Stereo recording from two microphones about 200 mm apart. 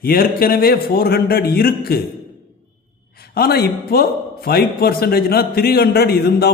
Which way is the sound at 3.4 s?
50° left (ahead or behind).